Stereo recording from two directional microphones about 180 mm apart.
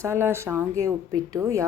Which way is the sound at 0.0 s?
15° right (ahead or behind).